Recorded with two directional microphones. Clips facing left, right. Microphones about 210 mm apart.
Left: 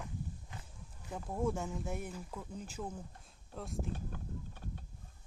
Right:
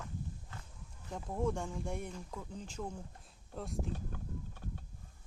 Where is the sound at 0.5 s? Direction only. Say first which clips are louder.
Left 1 dB; 15° left (ahead or behind).